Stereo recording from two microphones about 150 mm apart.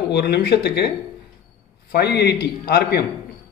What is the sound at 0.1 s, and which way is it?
Speech, 90° left.